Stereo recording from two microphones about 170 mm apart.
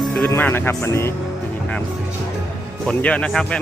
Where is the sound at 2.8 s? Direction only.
5° left (ahead or behind).